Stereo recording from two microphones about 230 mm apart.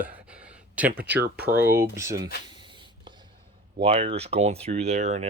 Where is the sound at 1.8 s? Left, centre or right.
Centre.